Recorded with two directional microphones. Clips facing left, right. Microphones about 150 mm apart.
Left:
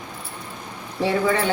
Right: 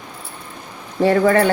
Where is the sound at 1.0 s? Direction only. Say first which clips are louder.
Right 7 dB; 50° right (ahead or behind).